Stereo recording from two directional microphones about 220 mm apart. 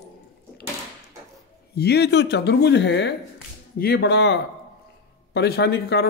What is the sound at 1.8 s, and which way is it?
Speech, 50° left (ahead or behind).